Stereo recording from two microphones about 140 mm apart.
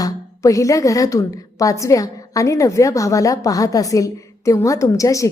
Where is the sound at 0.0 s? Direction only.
25° left (ahead or behind).